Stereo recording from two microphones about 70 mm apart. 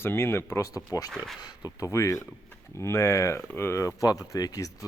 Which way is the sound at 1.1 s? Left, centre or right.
Centre.